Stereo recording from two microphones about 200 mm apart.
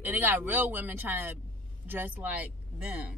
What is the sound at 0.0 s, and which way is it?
Speech, 10° right (ahead or behind).